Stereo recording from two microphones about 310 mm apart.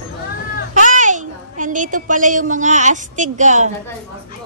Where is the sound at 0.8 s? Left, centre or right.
Right.